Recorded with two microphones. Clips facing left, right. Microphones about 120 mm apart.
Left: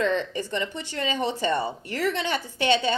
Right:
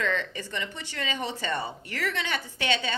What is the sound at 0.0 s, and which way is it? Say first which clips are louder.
Speech: left 5 dB; 25° left (ahead or behind).